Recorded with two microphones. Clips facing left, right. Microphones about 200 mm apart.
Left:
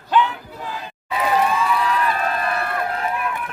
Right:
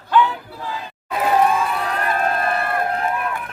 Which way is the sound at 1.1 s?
50° right (ahead or behind).